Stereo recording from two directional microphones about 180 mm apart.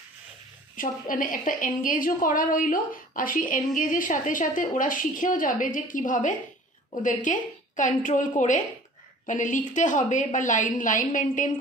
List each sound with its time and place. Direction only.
0.7 s a woman's voice: 50° left (ahead or behind)
9.3 s a woman's voice: 45° left (ahead or behind)